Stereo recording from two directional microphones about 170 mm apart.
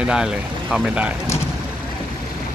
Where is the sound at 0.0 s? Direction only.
5° right (ahead or behind).